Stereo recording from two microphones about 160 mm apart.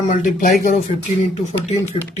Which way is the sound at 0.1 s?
50° left (ahead or behind).